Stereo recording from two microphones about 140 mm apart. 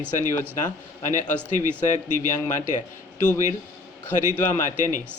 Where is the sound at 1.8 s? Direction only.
65° left (ahead or behind).